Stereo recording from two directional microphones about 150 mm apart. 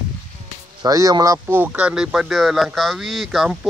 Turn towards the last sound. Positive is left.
turn(degrees=0)  # may be behind; listen again after turning